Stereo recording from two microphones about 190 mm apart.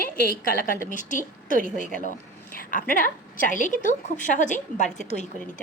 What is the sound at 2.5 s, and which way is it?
A woman's voice, 45° left (ahead or behind).